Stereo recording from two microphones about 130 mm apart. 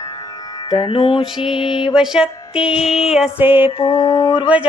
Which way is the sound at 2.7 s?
50° left (ahead or behind).